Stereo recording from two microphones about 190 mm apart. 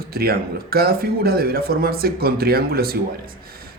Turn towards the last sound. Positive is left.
turn(degrees=-50)  # may be behind; listen again after turning